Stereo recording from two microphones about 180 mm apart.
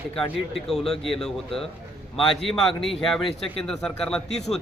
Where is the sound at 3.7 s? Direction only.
5° left (ahead or behind).